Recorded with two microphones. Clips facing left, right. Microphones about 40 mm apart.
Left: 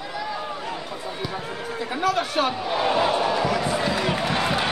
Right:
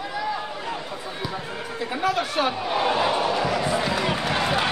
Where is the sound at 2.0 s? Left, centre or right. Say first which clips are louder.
Left 1 dB; right.